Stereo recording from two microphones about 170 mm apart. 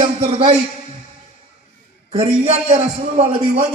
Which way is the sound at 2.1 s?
40° right (ahead or behind).